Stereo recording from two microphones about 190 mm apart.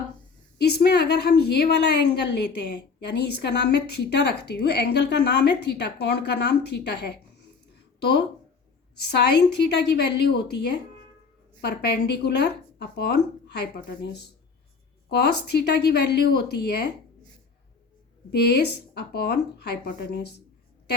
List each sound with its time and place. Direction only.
0.6 s a woman's voice: 60° left (ahead or behind)
9.0 s a woman's voice: 60° left (ahead or behind)
11.6 s a woman's voice: 60° left (ahead or behind)
18.3 s a woman's voice: 60° left (ahead or behind)